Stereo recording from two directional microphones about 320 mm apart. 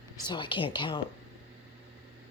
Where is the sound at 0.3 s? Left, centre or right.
Centre.